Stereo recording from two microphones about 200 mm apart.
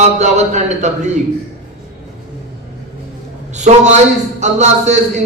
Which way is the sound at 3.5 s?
35° right (ahead or behind).